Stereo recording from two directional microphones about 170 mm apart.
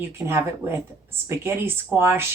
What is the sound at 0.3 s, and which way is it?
Speech, 15° right (ahead or behind).